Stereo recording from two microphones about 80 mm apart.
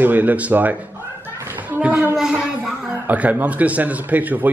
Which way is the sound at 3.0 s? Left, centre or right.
Centre.